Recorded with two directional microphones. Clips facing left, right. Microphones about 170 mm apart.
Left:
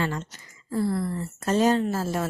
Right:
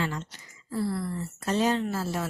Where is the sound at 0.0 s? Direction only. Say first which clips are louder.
Left 3 dB; 50° left (ahead or behind).